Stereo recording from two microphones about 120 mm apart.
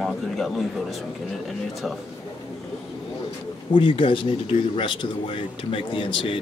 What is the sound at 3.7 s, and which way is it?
Speech, 45° left (ahead or behind).